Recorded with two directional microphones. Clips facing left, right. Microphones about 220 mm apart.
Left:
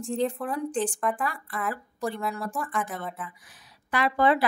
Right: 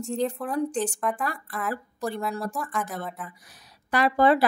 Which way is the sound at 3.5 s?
40° right (ahead or behind).